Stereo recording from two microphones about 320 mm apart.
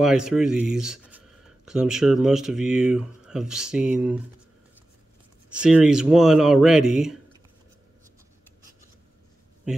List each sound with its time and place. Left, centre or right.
0.0 s speech: centre
5.6 s speech: centre
9.7 s speech: centre